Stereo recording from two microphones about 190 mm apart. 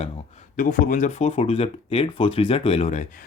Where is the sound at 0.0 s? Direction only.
40° left (ahead or behind).